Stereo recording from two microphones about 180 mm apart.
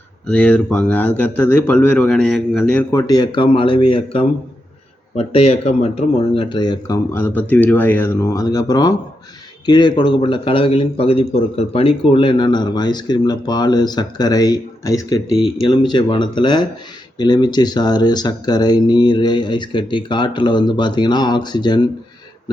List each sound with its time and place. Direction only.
0.3 s a man's voice: 5° left (ahead or behind)
2.9 s a man's voice: 20° left (ahead or behind)